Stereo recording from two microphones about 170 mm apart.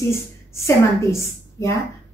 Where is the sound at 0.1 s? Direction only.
15° left (ahead or behind).